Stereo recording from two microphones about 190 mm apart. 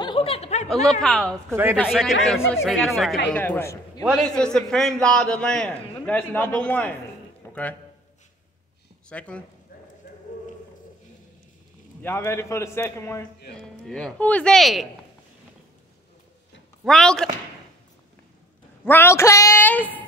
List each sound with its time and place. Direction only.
0.0 s a sound: 25° left (ahead or behind)
0.7 s a man's voice: centre (ahead or behind)
1.5 s a man's voice: 10° right (ahead or behind); by 4.0 s 15° left (ahead or behind)
4.0 s a man's voice: centre (ahead or behind)
7.4 s music: 10° left (ahead or behind)
9.1 s a man's voice: 5° left (ahead or behind)
10.3 s a sound: 45° left (ahead or behind)
12.0 s a man's voice: 10° left (ahead or behind)
13.6 s a man's voice: 5° left (ahead or behind)
16.8 s a man's voice: centre (ahead or behind)
18.9 s a man's voice: 15° left (ahead or behind)